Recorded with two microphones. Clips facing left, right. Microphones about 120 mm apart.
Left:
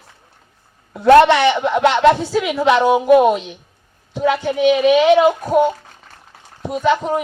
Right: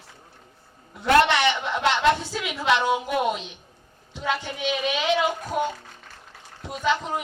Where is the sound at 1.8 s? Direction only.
45° left (ahead or behind).